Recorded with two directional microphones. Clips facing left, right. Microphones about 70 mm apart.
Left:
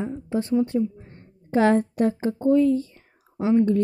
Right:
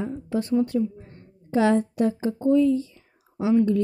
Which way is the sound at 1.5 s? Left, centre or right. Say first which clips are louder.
Left 1 dB; left.